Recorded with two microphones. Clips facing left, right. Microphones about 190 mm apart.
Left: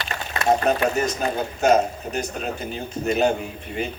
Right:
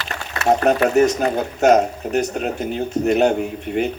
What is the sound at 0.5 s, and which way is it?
Speech, 65° right (ahead or behind).